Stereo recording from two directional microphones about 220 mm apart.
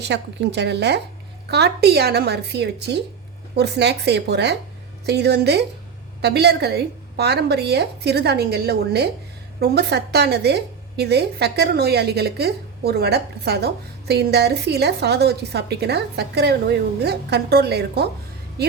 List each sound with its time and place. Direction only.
0.0 s a woman's voice: 50° right (ahead or behind)